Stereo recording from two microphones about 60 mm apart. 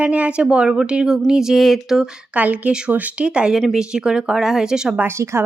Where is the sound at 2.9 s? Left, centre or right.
Right.